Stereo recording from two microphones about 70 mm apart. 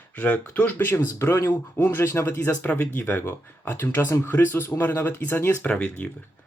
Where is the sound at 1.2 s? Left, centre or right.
Left.